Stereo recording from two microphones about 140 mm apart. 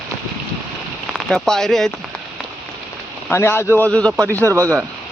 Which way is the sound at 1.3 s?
5° left (ahead or behind).